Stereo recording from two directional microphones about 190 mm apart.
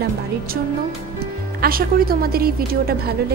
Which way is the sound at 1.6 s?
50° right (ahead or behind).